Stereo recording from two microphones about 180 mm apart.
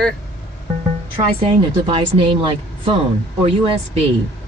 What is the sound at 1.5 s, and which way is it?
A woman's voice, 30° right (ahead or behind).